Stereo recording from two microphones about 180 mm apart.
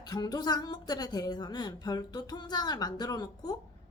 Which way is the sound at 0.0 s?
20° left (ahead or behind).